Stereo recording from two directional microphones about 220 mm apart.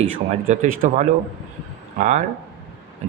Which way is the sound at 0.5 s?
35° right (ahead or behind).